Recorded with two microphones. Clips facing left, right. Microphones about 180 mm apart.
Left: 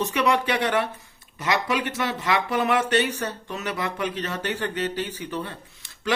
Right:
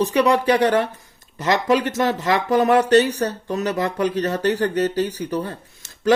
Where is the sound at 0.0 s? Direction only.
35° right (ahead or behind).